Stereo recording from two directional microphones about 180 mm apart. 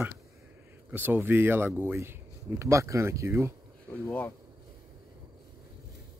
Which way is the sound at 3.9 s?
10° left (ahead or behind).